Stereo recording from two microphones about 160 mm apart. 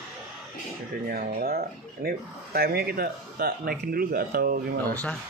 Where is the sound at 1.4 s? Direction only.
70° right (ahead or behind).